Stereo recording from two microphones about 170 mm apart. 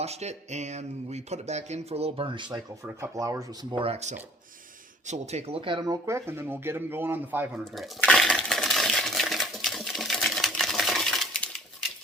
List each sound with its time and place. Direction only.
0.0 s speech: 40° right (ahead or behind)
2.8 s speech: 15° right (ahead or behind)
7.6 s coin: centre (ahead or behind)